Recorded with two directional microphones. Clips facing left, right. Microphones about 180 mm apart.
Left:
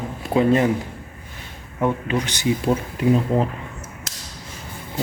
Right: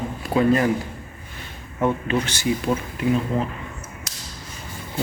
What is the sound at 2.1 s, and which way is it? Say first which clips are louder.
Speech: even; 15° left (ahead or behind).